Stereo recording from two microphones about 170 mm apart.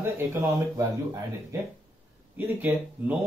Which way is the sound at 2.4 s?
10° right (ahead or behind).